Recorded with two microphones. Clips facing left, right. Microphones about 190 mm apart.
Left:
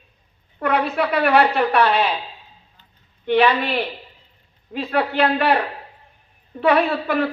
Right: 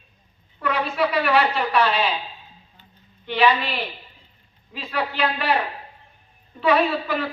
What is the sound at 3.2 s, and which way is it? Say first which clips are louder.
A woman's voice: left 3 dB; 55° left (ahead or behind).